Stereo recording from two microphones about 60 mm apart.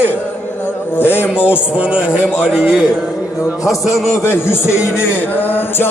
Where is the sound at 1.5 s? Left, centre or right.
Right.